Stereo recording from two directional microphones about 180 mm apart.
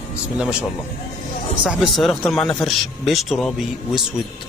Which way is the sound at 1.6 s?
Centre (ahead or behind).